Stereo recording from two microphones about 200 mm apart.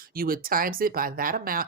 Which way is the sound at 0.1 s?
45° right (ahead or behind).